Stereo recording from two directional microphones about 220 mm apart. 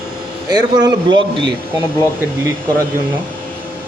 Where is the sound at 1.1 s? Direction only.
55° right (ahead or behind).